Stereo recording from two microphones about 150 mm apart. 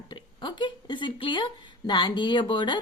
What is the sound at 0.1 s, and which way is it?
Speech, 30° left (ahead or behind).